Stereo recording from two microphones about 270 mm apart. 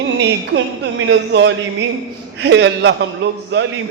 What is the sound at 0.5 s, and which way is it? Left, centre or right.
A woman's voice, right.